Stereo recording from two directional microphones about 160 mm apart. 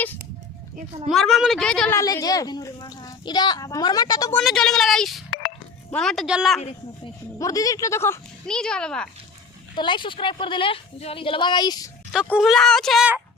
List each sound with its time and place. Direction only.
1.1 s a woman's voice: centre (ahead or behind)
1.9 s speech: 20° left (ahead or behind)
4.4 s a woman's voice: centre (ahead or behind)
7.3 s speech: 20° left (ahead or behind)
8.4 s a woman's voice: 5° left (ahead or behind)
9.7 s a woman's voice: 30° left (ahead or behind)
12.3 s a woman's voice: centre (ahead or behind)